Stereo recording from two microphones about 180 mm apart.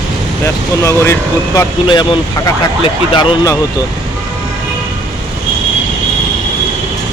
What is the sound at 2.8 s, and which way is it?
Speech, 20° left (ahead or behind).